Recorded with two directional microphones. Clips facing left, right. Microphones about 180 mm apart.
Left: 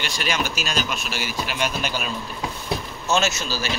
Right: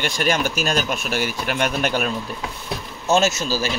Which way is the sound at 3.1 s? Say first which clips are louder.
Right 4 dB; 50° right (ahead or behind).